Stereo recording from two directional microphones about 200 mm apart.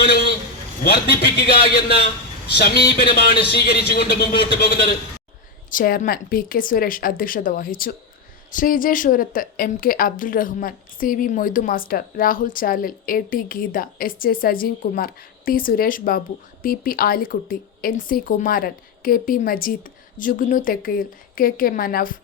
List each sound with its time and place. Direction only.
0.0 s a sound: 50° left (ahead or behind)
0.9 s speech: 50° left (ahead or behind)
3.0 s speech: 25° left (ahead or behind)
3.2 s speech: 50° left (ahead or behind)